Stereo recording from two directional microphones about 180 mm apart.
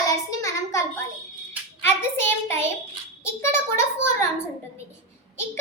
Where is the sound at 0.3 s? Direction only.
15° left (ahead or behind).